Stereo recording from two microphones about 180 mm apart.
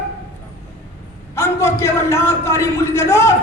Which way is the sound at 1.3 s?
15° left (ahead or behind).